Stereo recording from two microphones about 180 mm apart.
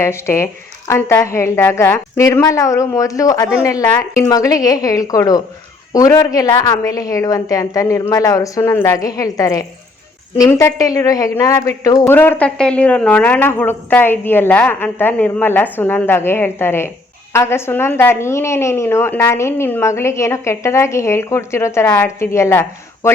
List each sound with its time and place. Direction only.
0.0 s a woman's voice: 15° left (ahead or behind)